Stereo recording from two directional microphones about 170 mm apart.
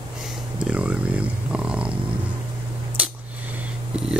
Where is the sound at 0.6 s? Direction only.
5° right (ahead or behind).